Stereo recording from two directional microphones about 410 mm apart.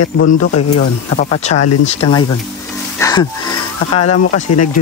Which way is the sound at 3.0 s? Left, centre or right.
Centre.